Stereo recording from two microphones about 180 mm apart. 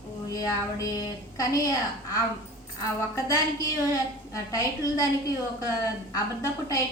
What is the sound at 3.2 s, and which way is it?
Speech, 20° left (ahead or behind).